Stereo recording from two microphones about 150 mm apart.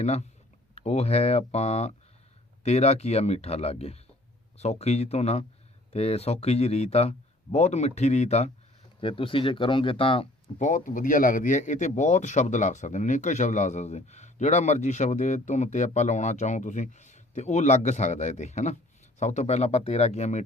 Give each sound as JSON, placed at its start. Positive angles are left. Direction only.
{"t": 0.0, "sound": "a man's voice", "side_deg": 45}
{"t": 9.0, "sound": "speech", "side_deg": 35}
{"t": 10.6, "sound": "a man's voice", "side_deg": 60}